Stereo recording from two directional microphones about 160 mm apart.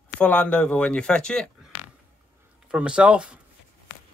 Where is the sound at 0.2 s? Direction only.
10° left (ahead or behind).